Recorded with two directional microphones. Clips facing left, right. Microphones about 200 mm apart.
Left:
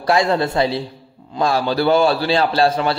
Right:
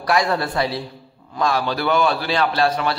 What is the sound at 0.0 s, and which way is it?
A man's voice, 25° left (ahead or behind).